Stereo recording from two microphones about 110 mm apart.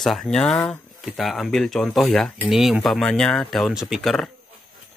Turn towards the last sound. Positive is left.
turn(degrees=0)  # may be behind; listen again after turning